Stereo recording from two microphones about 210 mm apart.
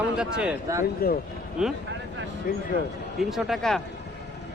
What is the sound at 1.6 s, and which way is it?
Speech, 5° right (ahead or behind).